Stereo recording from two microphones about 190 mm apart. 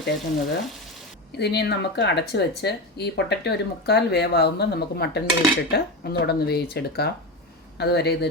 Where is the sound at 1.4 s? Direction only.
60° left (ahead or behind).